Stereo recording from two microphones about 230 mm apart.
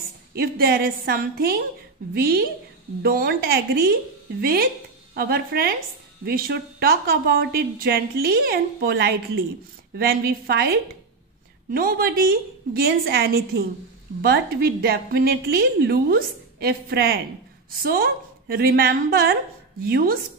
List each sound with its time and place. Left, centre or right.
0.3 s a woman's voice: right